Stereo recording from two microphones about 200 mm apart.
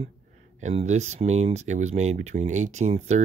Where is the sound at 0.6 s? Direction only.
35° right (ahead or behind).